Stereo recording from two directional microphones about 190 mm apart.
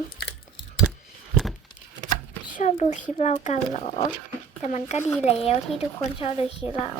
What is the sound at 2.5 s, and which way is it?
A child's voice, 40° left (ahead or behind).